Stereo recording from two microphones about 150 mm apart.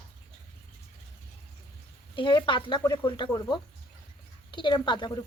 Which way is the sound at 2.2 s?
30° left (ahead or behind).